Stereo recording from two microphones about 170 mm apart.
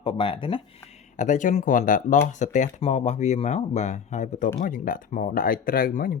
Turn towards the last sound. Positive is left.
turn(degrees=55)  # may be behind; listen again after turning